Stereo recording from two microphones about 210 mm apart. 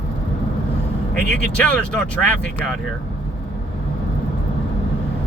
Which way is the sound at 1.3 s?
5° left (ahead or behind).